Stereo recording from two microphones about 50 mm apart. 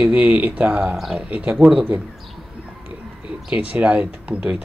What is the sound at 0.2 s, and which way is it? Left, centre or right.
Speech, right.